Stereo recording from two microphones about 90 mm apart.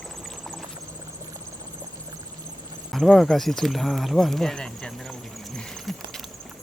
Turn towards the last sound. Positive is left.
turn(degrees=5)  # may be behind; listen again after turning